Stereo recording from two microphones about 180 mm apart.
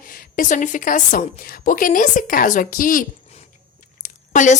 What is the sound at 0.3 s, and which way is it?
A woman's voice, 45° left (ahead or behind).